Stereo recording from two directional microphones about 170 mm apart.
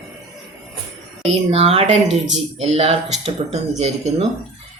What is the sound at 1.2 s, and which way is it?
Speech, 40° right (ahead or behind).